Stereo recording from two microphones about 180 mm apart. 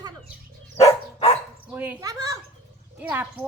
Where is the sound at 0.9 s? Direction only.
35° left (ahead or behind).